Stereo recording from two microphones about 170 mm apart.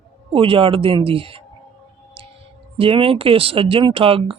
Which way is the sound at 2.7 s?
30° right (ahead or behind).